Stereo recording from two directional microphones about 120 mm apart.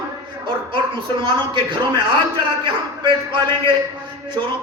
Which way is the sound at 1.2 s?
45° right (ahead or behind).